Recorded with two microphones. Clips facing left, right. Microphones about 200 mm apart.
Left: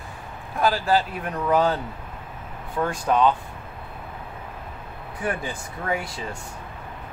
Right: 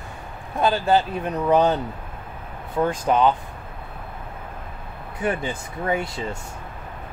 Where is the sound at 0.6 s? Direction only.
25° right (ahead or behind).